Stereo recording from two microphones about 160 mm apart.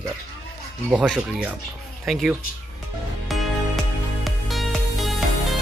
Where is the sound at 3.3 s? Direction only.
Centre (ahead or behind).